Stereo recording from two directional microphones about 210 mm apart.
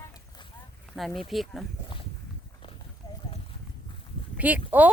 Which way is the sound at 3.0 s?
15° left (ahead or behind).